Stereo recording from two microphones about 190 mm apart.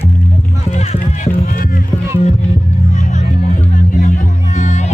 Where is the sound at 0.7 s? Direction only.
45° left (ahead or behind).